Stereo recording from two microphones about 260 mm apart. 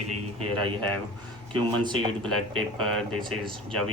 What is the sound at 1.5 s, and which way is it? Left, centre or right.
Speech, centre.